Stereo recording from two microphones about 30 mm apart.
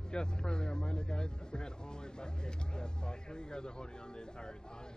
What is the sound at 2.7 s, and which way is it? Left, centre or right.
Speech, left.